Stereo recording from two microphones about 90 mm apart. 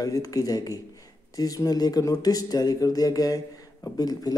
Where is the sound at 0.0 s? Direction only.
40° left (ahead or behind).